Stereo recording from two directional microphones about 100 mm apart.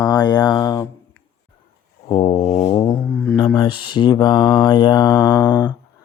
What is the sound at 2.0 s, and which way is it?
Brass instrument, 65° left (ahead or behind).